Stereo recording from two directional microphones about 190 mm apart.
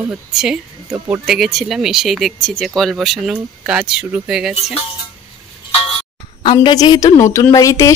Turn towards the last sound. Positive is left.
turn(degrees=15)  # may be behind; listen again after turning